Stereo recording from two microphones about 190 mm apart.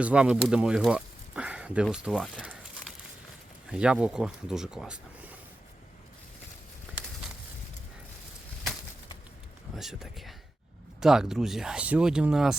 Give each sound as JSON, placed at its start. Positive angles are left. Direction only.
{"t": 0.0, "sound": "speech", "side_deg": -5}
{"t": 3.7, "sound": "speech", "side_deg": -5}
{"t": 6.9, "sound": "a sound", "side_deg": -5}
{"t": 9.7, "sound": "speech", "side_deg": 0}